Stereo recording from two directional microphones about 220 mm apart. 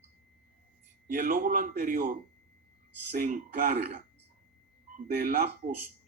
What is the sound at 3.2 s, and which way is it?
Speech, 35° right (ahead or behind).